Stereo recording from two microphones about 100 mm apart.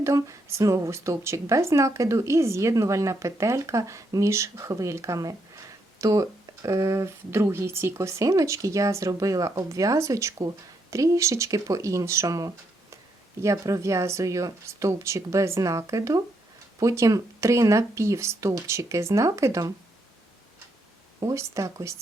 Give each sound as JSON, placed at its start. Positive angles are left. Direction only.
{"t": 0.0, "sound": "speech", "side_deg": -30}
{"t": 21.2, "sound": "speech", "side_deg": -35}